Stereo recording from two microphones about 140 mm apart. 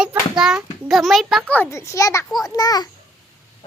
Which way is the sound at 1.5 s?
10° left (ahead or behind).